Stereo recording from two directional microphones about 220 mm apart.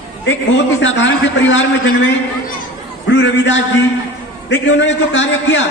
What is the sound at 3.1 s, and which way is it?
A man's voice, 55° left (ahead or behind).